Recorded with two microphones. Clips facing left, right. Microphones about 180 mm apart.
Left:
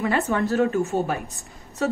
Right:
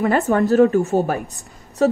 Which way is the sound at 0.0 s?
45° right (ahead or behind).